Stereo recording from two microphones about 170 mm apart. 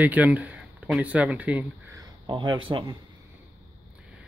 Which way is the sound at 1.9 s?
25° right (ahead or behind).